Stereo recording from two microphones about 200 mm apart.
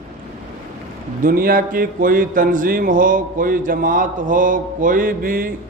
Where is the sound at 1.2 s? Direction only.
45° right (ahead or behind).